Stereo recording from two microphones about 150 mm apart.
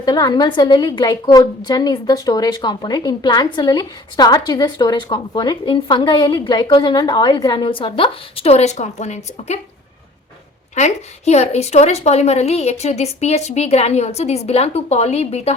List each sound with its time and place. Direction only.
0.0 s a woman's voice: 25° left (ahead or behind); by 9.6 s 50° left (ahead or behind)
10.8 s a woman's voice: 50° left (ahead or behind)